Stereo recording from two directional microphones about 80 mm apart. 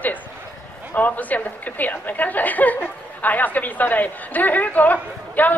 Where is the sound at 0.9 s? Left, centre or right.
Centre.